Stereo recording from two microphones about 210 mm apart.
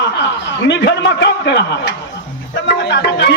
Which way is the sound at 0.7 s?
55° left (ahead or behind).